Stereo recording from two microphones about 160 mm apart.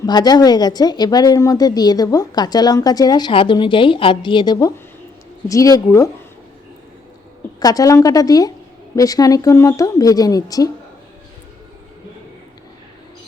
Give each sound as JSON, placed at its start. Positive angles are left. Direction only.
{"t": 0.0, "sound": "speech", "side_deg": 25}
{"t": 7.6, "sound": "speech", "side_deg": 20}